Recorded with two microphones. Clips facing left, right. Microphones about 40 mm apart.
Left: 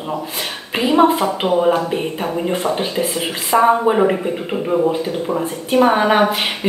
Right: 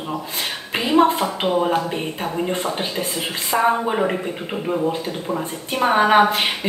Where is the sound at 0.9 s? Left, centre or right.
Centre.